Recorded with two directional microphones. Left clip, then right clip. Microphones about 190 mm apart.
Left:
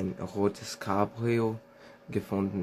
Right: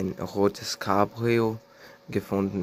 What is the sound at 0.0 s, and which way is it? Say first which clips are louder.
Speech: right 5 dB; 35° right (ahead or behind).